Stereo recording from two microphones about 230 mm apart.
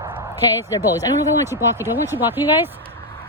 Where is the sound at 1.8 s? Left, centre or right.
Centre.